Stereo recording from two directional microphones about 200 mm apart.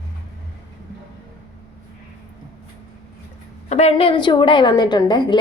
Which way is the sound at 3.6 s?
35° left (ahead or behind).